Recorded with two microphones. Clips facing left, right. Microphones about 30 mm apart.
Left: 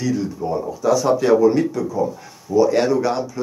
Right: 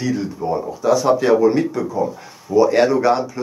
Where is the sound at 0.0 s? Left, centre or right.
Centre.